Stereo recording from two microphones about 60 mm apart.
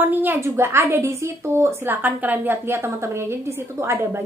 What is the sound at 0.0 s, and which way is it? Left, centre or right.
Speech, right.